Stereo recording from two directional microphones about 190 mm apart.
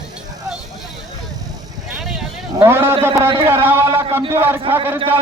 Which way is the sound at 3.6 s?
10° right (ahead or behind).